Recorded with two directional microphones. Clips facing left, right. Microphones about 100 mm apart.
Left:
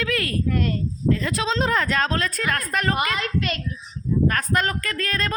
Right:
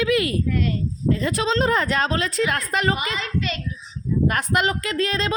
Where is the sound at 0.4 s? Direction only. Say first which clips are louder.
Even; 50° left (ahead or behind).